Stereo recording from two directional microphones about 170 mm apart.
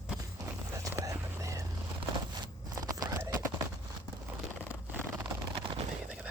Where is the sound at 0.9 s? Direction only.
20° right (ahead or behind).